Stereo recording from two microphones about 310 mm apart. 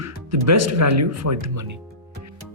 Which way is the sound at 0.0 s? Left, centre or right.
Right.